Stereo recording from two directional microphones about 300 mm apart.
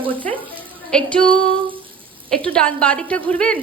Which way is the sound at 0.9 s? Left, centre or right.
Centre.